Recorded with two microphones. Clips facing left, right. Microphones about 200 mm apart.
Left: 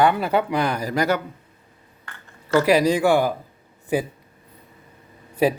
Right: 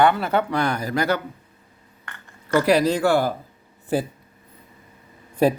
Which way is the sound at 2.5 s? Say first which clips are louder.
Left 1 dB; 10° left (ahead or behind).